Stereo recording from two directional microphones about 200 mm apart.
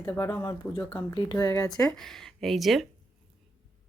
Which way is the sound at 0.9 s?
20° left (ahead or behind).